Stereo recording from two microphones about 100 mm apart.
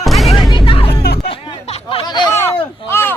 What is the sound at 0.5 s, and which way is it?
Music, 65° left (ahead or behind).